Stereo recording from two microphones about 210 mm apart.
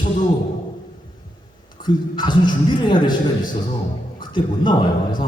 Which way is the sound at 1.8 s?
20° left (ahead or behind).